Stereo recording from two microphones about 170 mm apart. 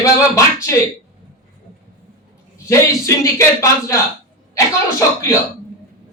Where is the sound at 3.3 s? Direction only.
15° left (ahead or behind).